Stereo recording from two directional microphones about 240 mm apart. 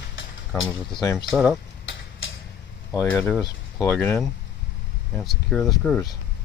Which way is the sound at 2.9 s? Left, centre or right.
Centre.